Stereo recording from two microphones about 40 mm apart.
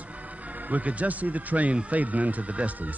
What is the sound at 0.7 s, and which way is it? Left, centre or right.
Speech, right.